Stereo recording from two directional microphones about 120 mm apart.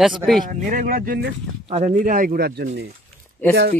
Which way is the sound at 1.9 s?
90° right.